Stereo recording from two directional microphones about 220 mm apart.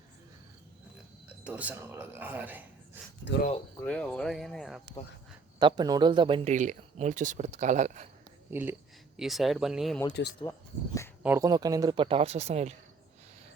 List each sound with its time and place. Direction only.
1.3 s speech: 5° right (ahead or behind)
3.3 s speech: 55° left (ahead or behind)
3.8 s speech: 5° left (ahead or behind)
5.5 s speech: 20° right (ahead or behind)
8.4 s speech: 10° right (ahead or behind)
10.5 s speech: 10° left (ahead or behind)
11.2 s speech: 10° right (ahead or behind); by 12.7 s 30° right (ahead or behind)